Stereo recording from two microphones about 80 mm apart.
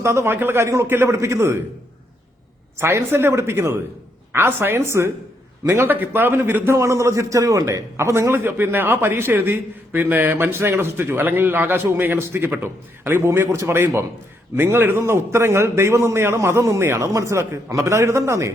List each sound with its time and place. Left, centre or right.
0.0 s a man's voice: right
2.7 s a man's voice: right
6.7 s a man's voice: right